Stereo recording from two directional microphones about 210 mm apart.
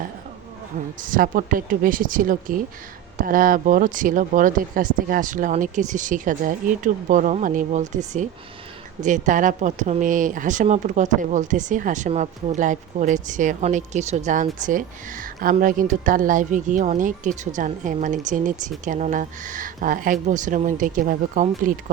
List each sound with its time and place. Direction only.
1.0 s speech: 40° right (ahead or behind)